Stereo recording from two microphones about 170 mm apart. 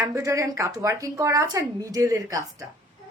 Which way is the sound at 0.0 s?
20° right (ahead or behind).